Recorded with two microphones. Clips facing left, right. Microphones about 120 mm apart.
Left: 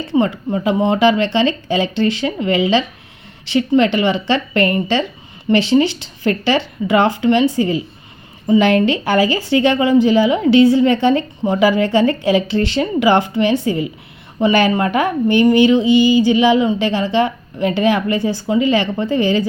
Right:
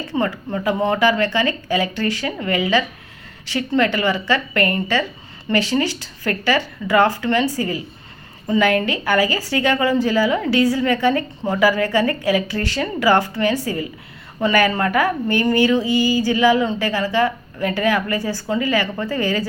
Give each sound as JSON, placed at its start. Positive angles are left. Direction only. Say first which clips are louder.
{"t": 0.1, "sound": "a woman's voice", "louder": "left 6 dB", "side_deg": 25}